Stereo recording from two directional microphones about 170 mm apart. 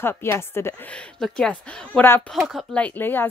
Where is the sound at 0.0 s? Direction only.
15° left (ahead or behind).